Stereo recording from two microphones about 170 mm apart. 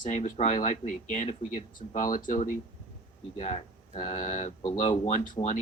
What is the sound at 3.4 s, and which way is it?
Speech, 40° left (ahead or behind).